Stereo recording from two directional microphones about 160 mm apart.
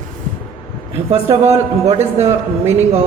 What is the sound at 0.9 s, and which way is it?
A man's voice, 40° right (ahead or behind).